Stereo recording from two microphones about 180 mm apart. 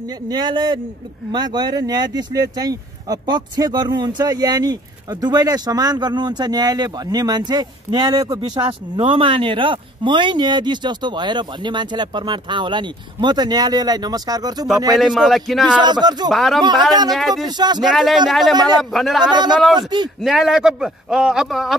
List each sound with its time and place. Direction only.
0.3 s speech: 25° right (ahead or behind)
15.0 s a man's voice: centre (ahead or behind)
15.8 s speech: 25° right (ahead or behind)
16.3 s a man's voice: centre (ahead or behind)
17.5 s speech: 25° right (ahead or behind)
17.8 s a man's voice: centre (ahead or behind)